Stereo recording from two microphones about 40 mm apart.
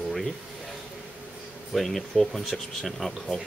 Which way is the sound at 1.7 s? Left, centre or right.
Centre.